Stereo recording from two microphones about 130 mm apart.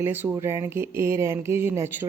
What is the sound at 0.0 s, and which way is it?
Speech, 15° right (ahead or behind).